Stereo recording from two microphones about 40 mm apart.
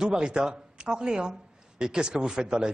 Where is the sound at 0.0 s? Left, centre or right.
Centre.